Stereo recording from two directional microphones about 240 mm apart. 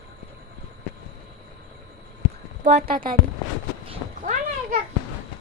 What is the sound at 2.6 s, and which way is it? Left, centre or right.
Speech, right.